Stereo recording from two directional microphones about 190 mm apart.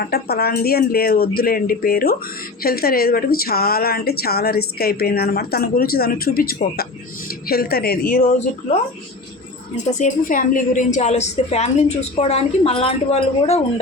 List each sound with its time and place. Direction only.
0.0 s a woman's voice: 55° left (ahead or behind)
9.7 s a woman's voice: 45° left (ahead or behind)